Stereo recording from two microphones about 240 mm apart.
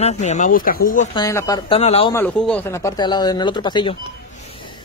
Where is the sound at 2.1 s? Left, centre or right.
Centre.